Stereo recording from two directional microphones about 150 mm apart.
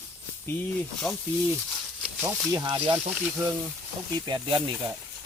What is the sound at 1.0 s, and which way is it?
Speech, centre (ahead or behind).